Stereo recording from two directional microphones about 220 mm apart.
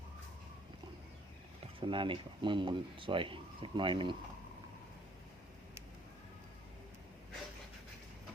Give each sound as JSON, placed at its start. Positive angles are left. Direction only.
{"t": 1.6, "sound": "speech", "side_deg": -25}